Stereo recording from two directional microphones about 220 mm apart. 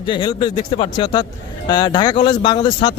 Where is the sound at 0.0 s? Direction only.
20° left (ahead or behind).